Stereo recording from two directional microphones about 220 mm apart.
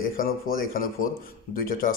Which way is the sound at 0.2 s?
40° left (ahead or behind).